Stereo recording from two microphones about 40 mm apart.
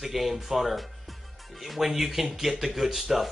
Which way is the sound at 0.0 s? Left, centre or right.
Centre.